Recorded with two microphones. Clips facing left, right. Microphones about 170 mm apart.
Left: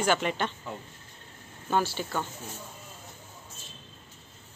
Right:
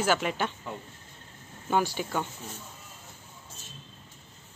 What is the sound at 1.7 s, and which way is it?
Speech, 15° right (ahead or behind).